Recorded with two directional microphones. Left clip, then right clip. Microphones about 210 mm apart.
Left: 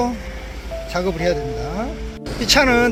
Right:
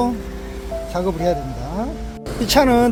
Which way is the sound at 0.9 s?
10° right (ahead or behind).